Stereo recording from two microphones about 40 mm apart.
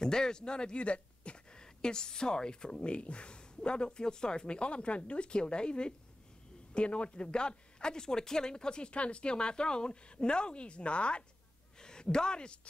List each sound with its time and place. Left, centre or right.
0.0 s speech: centre